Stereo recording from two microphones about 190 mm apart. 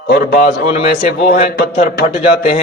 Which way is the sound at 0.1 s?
55° left (ahead or behind).